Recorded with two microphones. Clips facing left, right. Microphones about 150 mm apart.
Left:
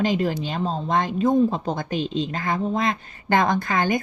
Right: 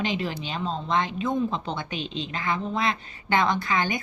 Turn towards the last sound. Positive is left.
turn(degrees=50)  # may be behind; listen again after turning